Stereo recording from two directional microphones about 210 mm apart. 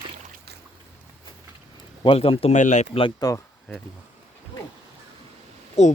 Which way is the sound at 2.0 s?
25° left (ahead or behind).